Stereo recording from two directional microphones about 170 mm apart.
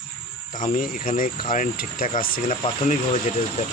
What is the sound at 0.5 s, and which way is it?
Speech, 50° left (ahead or behind).